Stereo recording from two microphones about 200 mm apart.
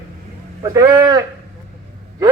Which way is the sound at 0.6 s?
15° right (ahead or behind).